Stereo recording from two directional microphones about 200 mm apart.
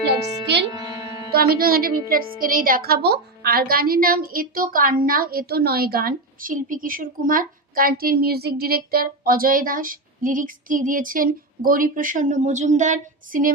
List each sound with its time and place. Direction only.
0.7 s music: 15° right (ahead or behind)
1.3 s a woman's voice: 50° right (ahead or behind)